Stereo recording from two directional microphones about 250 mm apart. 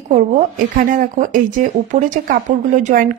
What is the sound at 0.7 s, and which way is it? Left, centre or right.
Speech, right.